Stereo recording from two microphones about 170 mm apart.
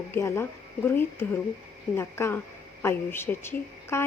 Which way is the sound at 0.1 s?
15° left (ahead or behind).